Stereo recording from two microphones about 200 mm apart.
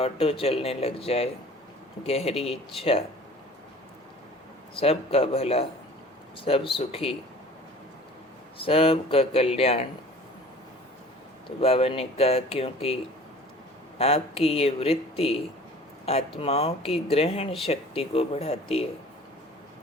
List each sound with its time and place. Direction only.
0.0 s speech: 30° left (ahead or behind)
4.7 s speech: 30° left (ahead or behind)
8.5 s speech: 25° left (ahead or behind)
11.4 s speech: 30° left (ahead or behind)
14.0 s speech: 30° left (ahead or behind)